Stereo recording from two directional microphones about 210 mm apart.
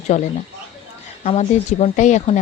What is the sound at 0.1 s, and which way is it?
Speech, 30° left (ahead or behind).